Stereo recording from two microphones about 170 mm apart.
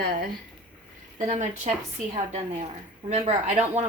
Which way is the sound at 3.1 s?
40° right (ahead or behind).